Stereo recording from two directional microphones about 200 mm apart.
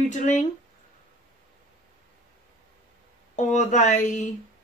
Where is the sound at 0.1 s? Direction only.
35° left (ahead or behind).